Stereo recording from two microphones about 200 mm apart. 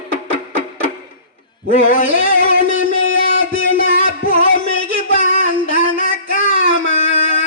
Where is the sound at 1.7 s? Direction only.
40° left (ahead or behind).